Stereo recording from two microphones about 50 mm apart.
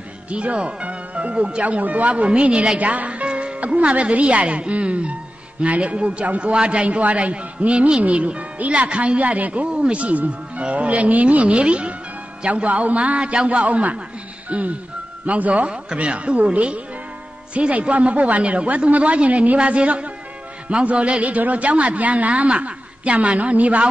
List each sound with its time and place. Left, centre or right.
0.3 s a man's voice: right